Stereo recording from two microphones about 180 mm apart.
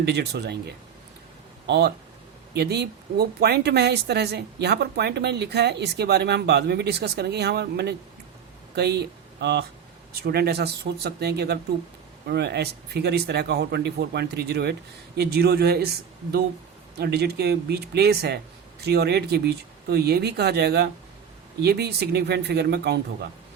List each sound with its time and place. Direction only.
0.0 s speech: 65° right (ahead or behind)
1.6 s speech: 65° right (ahead or behind)